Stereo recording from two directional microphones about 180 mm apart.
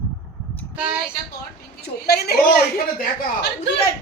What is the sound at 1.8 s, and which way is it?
A woman's voice, 60° left (ahead or behind).